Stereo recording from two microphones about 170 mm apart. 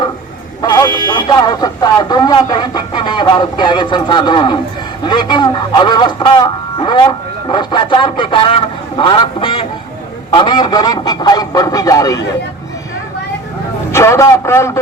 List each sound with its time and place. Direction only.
0.6 s buzzer: 25° left (ahead or behind)
1.0 s speech: 25° left (ahead or behind)
13.9 s a man's voice: 15° left (ahead or behind)